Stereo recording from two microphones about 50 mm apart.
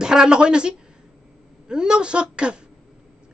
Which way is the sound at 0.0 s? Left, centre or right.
Centre.